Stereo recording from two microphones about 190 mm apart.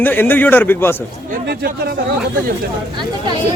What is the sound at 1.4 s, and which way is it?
Speech, 55° right (ahead or behind).